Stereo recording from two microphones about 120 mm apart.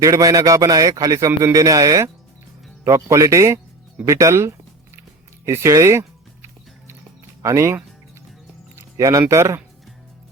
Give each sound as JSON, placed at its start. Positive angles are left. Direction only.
{"t": 0.0, "sound": "a man's voice", "side_deg": -30}
{"t": 5.5, "sound": "music", "side_deg": -25}
{"t": 7.4, "sound": "a man's voice", "side_deg": -25}
{"t": 8.7, "sound": "music", "side_deg": -25}
{"t": 9.3, "sound": "a man's voice", "side_deg": -25}